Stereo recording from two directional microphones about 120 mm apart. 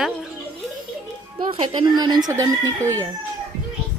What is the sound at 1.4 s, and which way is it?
Speech, 40° right (ahead or behind).